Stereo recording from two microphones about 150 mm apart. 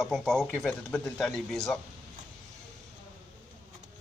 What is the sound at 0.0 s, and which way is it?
Speech, centre (ahead or behind).